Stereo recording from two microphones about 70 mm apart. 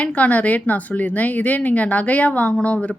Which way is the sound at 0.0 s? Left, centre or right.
Centre.